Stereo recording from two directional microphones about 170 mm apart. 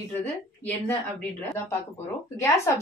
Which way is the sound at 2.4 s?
20° left (ahead or behind).